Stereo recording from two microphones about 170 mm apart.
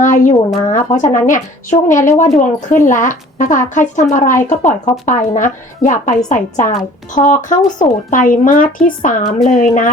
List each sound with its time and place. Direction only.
0.0 s speech: 50° left (ahead or behind)